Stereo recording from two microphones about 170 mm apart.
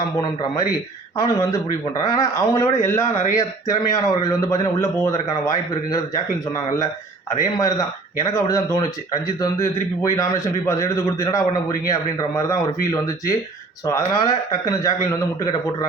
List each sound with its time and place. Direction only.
1.1 s a man's voice: 20° left (ahead or behind)